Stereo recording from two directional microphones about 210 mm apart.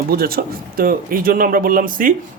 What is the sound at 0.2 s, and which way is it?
A man's voice, 45° right (ahead or behind).